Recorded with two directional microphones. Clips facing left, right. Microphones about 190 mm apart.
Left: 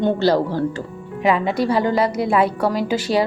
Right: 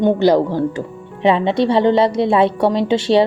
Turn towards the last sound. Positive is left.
turn(degrees=-25)  # may be behind; listen again after turning